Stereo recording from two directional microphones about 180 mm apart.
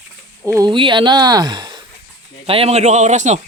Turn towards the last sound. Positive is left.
turn(degrees=-40)  # may be behind; listen again after turning